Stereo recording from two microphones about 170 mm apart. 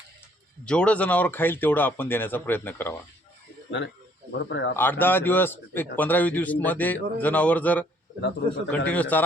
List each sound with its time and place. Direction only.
0.6 s a man's voice: 5° left (ahead or behind)
3.7 s speech: 90° left
4.8 s a man's voice: 10° left (ahead or behind)